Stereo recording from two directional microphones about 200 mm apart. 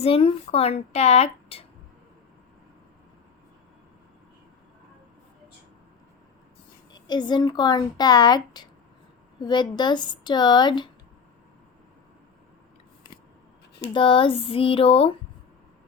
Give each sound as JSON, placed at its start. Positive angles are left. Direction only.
{"t": 0.0, "sound": "speech", "side_deg": 30}
{"t": 6.9, "sound": "speech", "side_deg": 20}
{"t": 13.9, "sound": "speech", "side_deg": 25}